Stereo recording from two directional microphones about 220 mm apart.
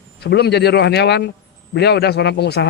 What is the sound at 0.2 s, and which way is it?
Speech, 50° left (ahead or behind).